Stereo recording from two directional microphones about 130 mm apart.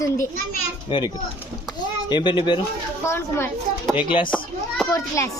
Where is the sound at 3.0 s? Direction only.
20° left (ahead or behind).